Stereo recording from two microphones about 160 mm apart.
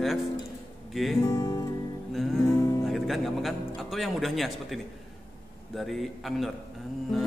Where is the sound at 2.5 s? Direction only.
20° left (ahead or behind).